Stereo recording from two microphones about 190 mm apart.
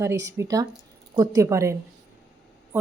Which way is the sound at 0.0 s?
15° right (ahead or behind).